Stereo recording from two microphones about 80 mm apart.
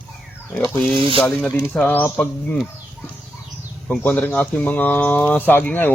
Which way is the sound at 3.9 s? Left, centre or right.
Left.